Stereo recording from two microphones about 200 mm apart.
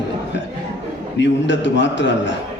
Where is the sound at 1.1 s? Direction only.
65° left (ahead or behind).